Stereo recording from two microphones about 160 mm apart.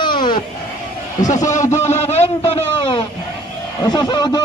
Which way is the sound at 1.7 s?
45° left (ahead or behind).